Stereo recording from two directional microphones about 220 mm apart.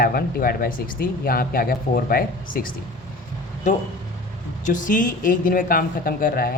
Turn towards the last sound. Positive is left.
turn(degrees=40)  # may be behind; listen again after turning